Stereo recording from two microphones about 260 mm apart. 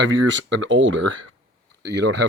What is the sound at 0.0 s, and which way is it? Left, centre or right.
Speech, right.